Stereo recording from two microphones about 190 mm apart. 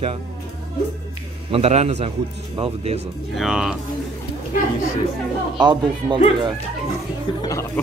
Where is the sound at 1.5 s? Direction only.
35° right (ahead or behind).